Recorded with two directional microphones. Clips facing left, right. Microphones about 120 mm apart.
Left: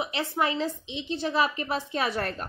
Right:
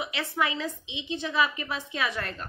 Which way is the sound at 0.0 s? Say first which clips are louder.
Left 2 dB; 25° left (ahead or behind).